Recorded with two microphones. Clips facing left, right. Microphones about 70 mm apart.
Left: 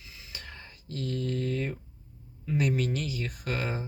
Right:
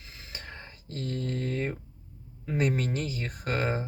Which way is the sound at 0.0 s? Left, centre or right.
Right.